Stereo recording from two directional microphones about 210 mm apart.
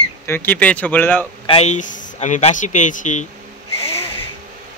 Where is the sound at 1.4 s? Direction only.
30° left (ahead or behind).